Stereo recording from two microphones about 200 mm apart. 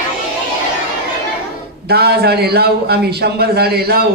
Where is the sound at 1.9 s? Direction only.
55° right (ahead or behind).